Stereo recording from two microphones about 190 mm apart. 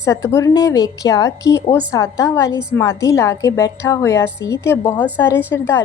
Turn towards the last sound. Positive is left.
turn(degrees=10)  # may be behind; listen again after turning